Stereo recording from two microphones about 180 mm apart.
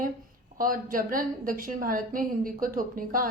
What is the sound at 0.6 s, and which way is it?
A woman's voice, 50° right (ahead or behind).